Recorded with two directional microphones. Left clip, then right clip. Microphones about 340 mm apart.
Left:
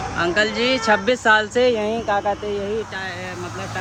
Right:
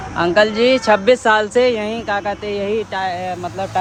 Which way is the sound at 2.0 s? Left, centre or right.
Right.